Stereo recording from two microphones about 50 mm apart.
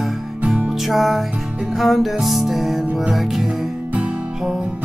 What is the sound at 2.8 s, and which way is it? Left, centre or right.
Music, right.